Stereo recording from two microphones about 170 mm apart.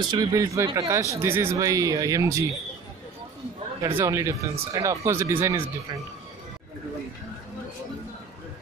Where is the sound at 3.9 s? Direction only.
15° right (ahead or behind).